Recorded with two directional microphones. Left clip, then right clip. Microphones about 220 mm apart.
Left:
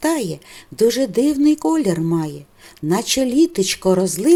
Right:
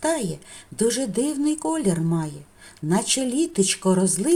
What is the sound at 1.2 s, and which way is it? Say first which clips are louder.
Speech: left 9 dB; 30° left (ahead or behind).